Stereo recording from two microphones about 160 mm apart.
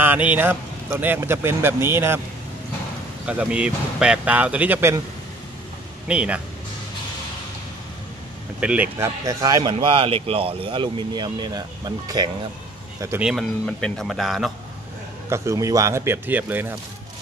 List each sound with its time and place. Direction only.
0.0 s speech: 10° right (ahead or behind)
3.3 s speech: 5° right (ahead or behind)
6.0 s speech: 5° right (ahead or behind)
8.5 s speech: 10° right (ahead or behind); by 12.3 s 25° right (ahead or behind)
13.2 s speech: 5° right (ahead or behind)
15.2 s speech: 20° right (ahead or behind)